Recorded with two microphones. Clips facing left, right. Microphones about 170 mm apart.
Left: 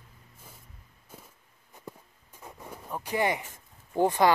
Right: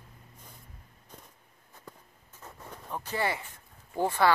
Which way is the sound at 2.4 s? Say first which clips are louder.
Left 2 dB; 10° left (ahead or behind).